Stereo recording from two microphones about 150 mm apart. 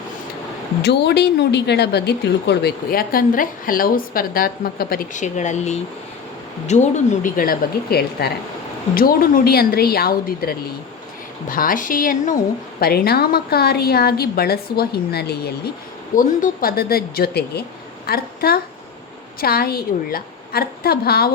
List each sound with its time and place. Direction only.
0.8 s a woman's voice: 90° left
9.0 s a woman's voice: 75° left (ahead or behind)
11.4 s a woman's voice: 65° left (ahead or behind)
12.8 s a woman's voice: 90° left
16.1 s a woman's voice: 70° left (ahead or behind); by 21.2 s 90° left